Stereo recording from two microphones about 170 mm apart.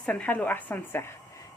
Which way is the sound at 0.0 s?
10° left (ahead or behind).